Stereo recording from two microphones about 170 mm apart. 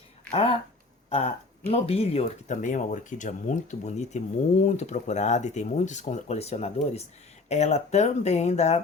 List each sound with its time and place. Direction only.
0.3 s speech: 35° left (ahead or behind)